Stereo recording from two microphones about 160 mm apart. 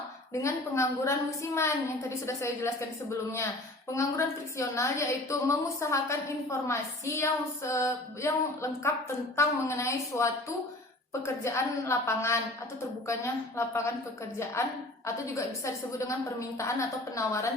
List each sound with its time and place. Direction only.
0.4 s a woman's voice: 20° left (ahead or behind)
3.9 s a woman's voice: 20° left (ahead or behind)
11.4 s a woman's voice: 20° left (ahead or behind)